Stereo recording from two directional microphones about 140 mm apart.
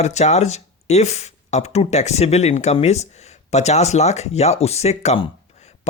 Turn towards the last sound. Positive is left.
turn(degrees=35)  # may be behind; listen again after turning